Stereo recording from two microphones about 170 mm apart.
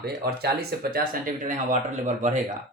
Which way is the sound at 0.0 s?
70° right (ahead or behind).